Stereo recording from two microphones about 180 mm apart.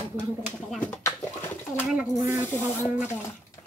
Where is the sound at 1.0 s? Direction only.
15° left (ahead or behind).